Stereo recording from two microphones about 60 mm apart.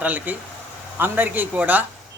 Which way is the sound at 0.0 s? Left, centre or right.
Right.